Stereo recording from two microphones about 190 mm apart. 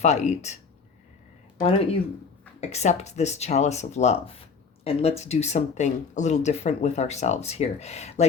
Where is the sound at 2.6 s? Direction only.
35° left (ahead or behind).